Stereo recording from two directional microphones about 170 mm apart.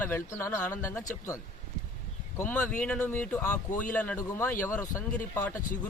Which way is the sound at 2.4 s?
10° left (ahead or behind).